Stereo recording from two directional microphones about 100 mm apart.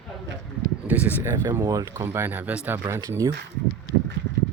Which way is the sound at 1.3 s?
40° right (ahead or behind).